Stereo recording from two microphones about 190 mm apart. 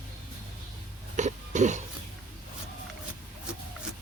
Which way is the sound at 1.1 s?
40° right (ahead or behind).